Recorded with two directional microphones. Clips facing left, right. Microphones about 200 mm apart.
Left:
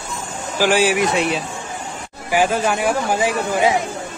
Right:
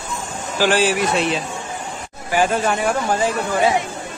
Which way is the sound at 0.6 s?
10° left (ahead or behind).